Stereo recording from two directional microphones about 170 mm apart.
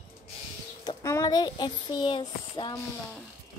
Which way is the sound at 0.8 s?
20° left (ahead or behind).